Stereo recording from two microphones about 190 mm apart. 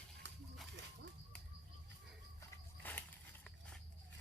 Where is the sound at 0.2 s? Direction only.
65° right (ahead or behind).